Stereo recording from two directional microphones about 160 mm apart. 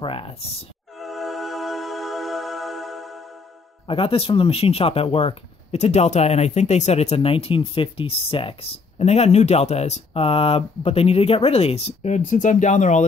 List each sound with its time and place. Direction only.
0.0 s speech: 35° left (ahead or behind)
1.0 s music: centre (ahead or behind)
3.8 s speech: 35° left (ahead or behind)